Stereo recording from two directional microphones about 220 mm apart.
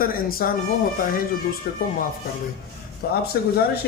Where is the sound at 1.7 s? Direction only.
45° left (ahead or behind).